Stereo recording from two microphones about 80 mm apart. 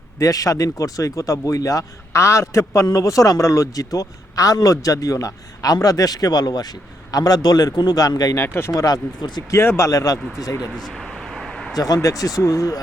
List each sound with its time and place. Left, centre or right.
0.2 s speech: left
8.4 s speech: left
8.7 s speech: left
9.5 s speech: left
10.8 s a sound: centre
12.0 s speech: left